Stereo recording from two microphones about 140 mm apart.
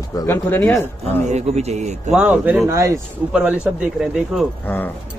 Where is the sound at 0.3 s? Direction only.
15° left (ahead or behind).